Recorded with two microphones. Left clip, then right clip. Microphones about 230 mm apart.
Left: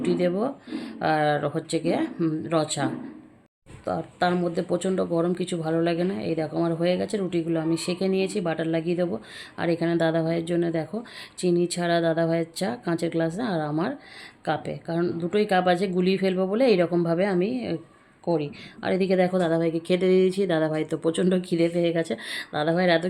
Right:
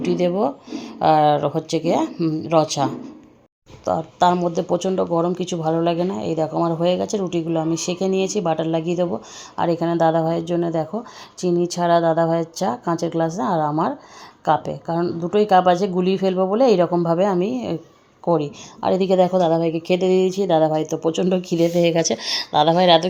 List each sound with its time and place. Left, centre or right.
0.0 s speech: centre
21.6 s speech: right
22.0 s speech: centre